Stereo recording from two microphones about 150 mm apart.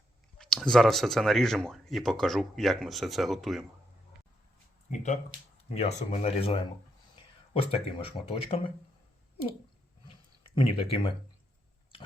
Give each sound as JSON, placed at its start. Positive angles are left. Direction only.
{"t": 0.3, "sound": "speech", "side_deg": 5}
{"t": 5.3, "sound": "speech", "side_deg": 45}
{"t": 10.1, "sound": "a sound", "side_deg": 35}